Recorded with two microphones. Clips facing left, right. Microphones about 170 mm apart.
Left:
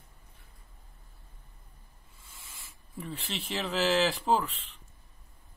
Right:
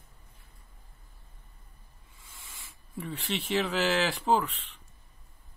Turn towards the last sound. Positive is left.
turn(degrees=0)  # may be behind; listen again after turning